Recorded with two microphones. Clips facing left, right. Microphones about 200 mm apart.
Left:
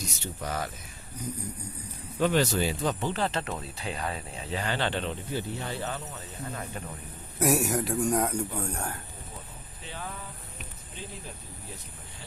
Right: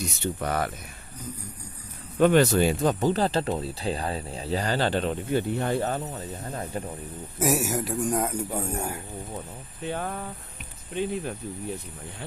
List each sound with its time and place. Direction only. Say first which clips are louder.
0.2 s speech: right 7 dB; 60° right (ahead or behind)
2.1 s speech: right 6 dB; 55° right (ahead or behind)
5.3 s speech: right 12 dB; 55° right (ahead or behind)
6.1 s speech: right 4 dB; 35° right (ahead or behind)
7.3 s a man's voice: even; centre (ahead or behind)
9.8 s speech: right 9 dB; 55° right (ahead or behind)